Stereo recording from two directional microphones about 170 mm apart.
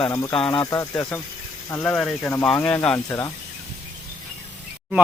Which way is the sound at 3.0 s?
20° left (ahead or behind).